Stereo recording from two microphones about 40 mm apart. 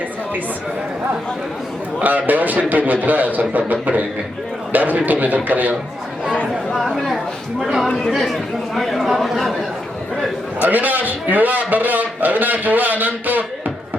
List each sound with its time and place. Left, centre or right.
2.0 s a man's voice: right
6.9 s a sound: centre
7.6 s speech: centre
7.9 s speech: centre
8.1 s speech: centre
10.6 s a man's voice: right